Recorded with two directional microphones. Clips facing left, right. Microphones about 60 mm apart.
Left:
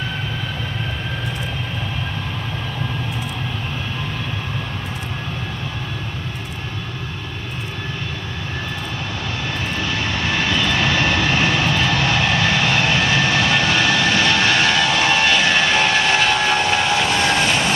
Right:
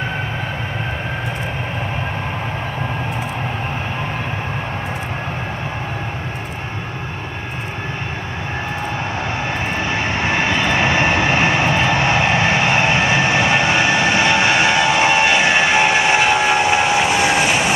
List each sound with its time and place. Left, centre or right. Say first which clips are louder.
9.5 s vehicle: right 3 dB; right